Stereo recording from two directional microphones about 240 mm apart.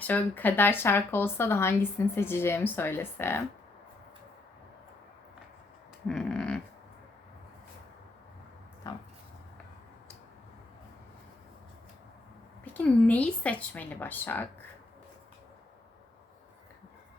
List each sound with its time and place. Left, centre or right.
0.0 s speech: centre
6.1 s dog: centre
8.9 s speech: centre
12.7 s speech: centre